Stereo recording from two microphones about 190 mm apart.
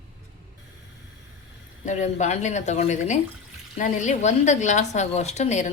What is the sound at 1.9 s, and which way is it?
Speech, 40° left (ahead or behind).